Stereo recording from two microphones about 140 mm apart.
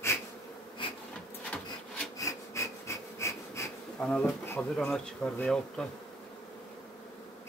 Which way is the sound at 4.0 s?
5° left (ahead or behind).